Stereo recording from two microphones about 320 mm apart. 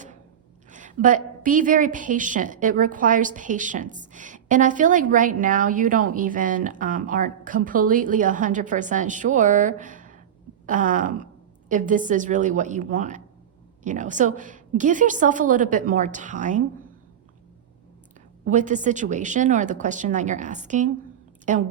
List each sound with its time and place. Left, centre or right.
0.7 s a woman's voice: right
18.4 s a woman's voice: right